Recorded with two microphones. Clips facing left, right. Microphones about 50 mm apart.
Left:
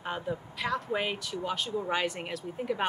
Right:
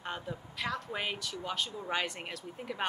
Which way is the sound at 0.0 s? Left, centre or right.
Centre.